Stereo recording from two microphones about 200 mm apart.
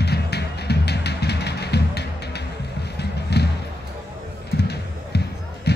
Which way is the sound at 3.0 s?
55° left (ahead or behind).